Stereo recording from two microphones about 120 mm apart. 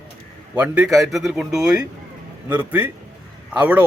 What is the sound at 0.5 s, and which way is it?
Speech, 15° right (ahead or behind).